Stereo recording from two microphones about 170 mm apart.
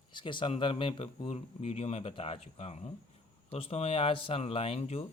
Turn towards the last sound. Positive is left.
turn(degrees=35)  # may be behind; listen again after turning